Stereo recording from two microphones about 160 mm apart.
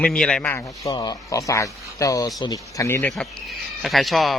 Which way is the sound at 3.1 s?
Centre (ahead or behind).